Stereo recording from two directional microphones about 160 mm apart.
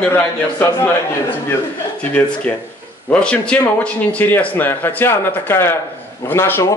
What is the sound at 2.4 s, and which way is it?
Speech, 10° left (ahead or behind).